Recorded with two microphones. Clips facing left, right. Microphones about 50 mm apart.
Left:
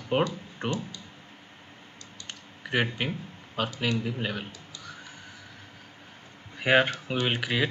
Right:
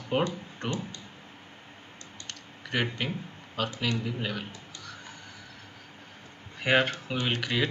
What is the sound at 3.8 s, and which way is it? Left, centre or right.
Speech, centre.